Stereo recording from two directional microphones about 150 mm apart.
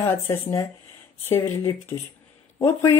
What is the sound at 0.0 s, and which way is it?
Speech, 15° left (ahead or behind).